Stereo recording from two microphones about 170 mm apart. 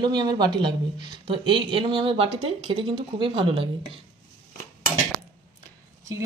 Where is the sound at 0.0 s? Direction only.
25° right (ahead or behind).